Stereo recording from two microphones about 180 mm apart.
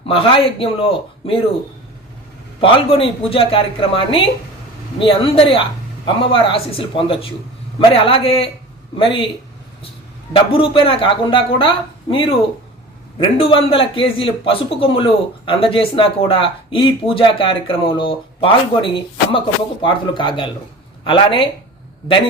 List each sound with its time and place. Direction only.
0.0 s speech: 30° left (ahead or behind)
2.6 s a man's voice: 30° left (ahead or behind)
10.3 s a man's voice: 30° left (ahead or behind)